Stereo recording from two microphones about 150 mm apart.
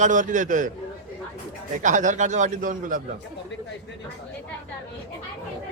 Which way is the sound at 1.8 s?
55° right (ahead or behind).